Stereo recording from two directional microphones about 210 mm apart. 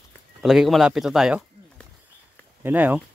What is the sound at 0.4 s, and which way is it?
Speech, centre (ahead or behind).